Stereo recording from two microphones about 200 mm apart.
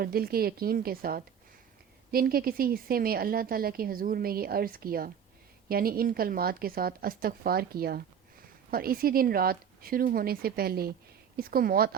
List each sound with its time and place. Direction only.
0.0 s a woman's voice: 50° right (ahead or behind)